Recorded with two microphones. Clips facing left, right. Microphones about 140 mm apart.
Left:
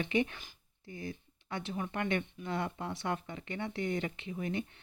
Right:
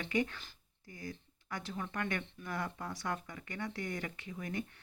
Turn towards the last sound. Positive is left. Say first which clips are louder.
# left 4 dB
turn(degrees=20)  # may be behind; listen again after turning